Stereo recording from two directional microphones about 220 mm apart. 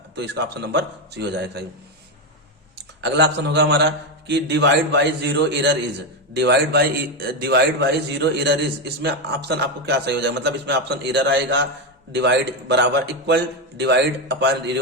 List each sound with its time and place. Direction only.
0.2 s a man's voice: 50° right (ahead or behind)
2.7 s a man's voice: 50° right (ahead or behind)